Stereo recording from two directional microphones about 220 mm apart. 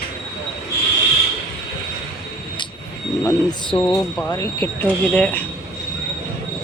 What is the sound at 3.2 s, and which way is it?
Speech, 20° left (ahead or behind).